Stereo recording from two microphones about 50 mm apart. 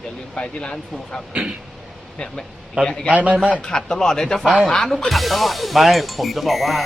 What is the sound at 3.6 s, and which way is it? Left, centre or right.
Speech, centre.